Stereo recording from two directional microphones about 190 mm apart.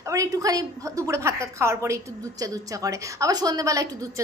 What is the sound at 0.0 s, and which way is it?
A woman's voice, 15° right (ahead or behind).